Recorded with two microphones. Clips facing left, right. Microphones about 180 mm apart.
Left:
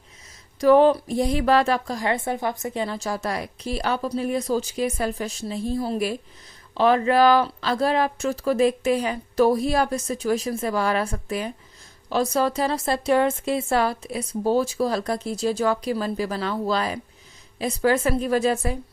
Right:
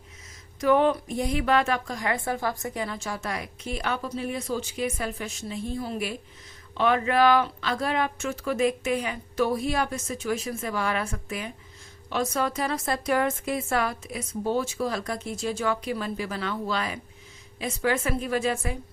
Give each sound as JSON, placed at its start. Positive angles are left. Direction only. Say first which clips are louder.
{"t": 0.6, "sound": "a woman's voice", "louder": "left 6 dB", "side_deg": 35}